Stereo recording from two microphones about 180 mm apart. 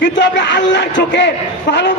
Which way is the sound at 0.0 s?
75° left (ahead or behind).